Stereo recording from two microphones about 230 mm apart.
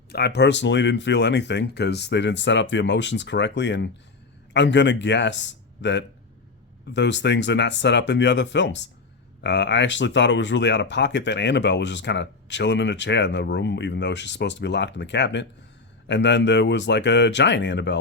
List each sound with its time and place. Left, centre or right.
0.1 s speech: left